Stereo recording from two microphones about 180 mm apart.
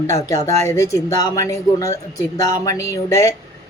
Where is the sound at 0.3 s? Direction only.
15° left (ahead or behind).